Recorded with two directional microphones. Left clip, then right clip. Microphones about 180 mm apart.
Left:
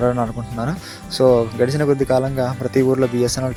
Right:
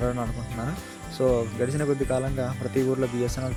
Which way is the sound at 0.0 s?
50° left (ahead or behind).